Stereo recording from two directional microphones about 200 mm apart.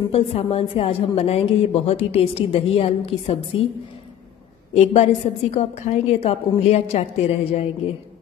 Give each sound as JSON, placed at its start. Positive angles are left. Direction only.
{"t": 0.1, "sound": "a woman's voice", "side_deg": 30}
{"t": 4.7, "sound": "a woman's voice", "side_deg": 30}